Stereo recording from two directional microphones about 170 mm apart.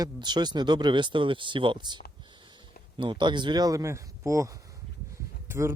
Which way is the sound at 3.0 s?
30° right (ahead or behind).